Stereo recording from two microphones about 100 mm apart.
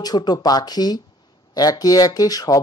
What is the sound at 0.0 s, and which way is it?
Speech, 40° left (ahead or behind).